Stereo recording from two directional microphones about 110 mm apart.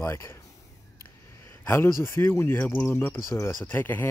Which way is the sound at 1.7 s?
25° left (ahead or behind).